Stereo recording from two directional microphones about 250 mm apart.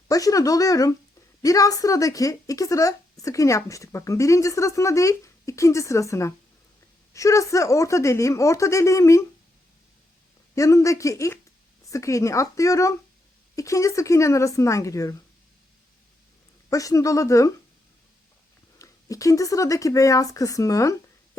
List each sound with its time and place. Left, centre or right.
0.1 s a woman's voice: centre
10.5 s a woman's voice: centre
16.6 s a woman's voice: centre
18.8 s a woman's voice: centre